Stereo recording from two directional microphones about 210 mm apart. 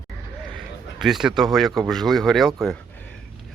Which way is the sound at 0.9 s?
Centre (ahead or behind).